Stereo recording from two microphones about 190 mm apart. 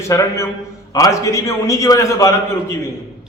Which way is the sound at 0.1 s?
15° left (ahead or behind).